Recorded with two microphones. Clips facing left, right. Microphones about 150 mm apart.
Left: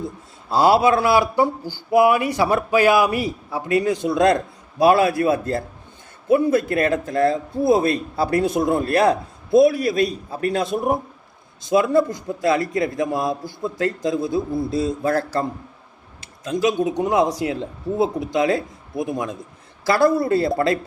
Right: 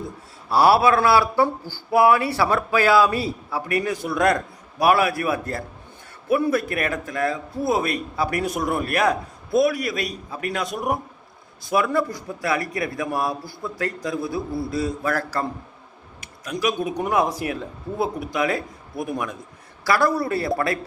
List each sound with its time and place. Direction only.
0.5 s speech: 20° left (ahead or behind)